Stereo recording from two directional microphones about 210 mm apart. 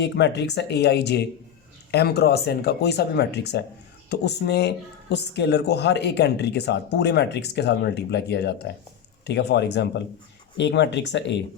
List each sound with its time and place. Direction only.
0.0 s speech: 55° left (ahead or behind)